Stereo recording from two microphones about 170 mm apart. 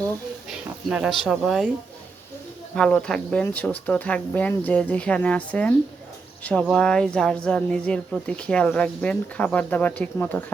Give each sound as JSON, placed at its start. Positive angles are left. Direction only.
{"t": 0.9, "sound": "speech", "side_deg": -5}
{"t": 2.7, "sound": "a woman's voice", "side_deg": 5}